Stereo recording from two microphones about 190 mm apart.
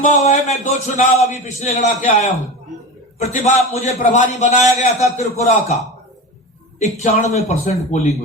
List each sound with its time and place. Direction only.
0.0 s a man's voice: 40° left (ahead or behind)
6.7 s a man's voice: 40° left (ahead or behind)